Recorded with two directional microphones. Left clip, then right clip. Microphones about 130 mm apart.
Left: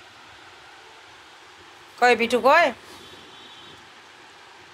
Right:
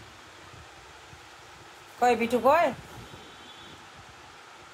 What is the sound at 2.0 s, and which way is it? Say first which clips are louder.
Speech: left 5 dB; 20° left (ahead or behind).